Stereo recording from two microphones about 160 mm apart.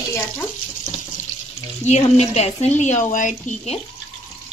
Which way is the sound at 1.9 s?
45° left (ahead or behind).